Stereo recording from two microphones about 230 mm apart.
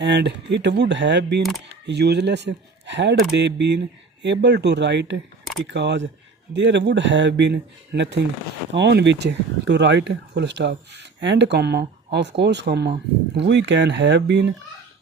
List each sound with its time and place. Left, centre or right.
0.0 s speech: right
1.4 s speech: centre
1.9 s speech: right